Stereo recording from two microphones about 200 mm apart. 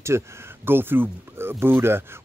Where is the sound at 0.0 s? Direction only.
15° right (ahead or behind).